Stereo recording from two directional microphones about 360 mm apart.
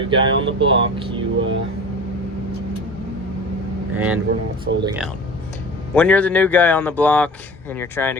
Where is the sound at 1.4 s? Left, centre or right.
Right.